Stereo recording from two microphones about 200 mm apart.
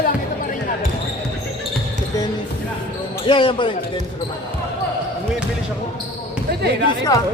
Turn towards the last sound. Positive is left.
turn(degrees=20)  # may be behind; listen again after turning